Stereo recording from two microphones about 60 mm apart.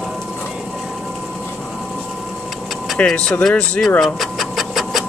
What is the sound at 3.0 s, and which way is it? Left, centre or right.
Speech, centre.